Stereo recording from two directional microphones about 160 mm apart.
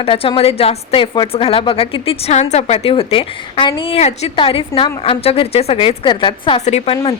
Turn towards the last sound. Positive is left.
turn(degrees=40)  # may be behind; listen again after turning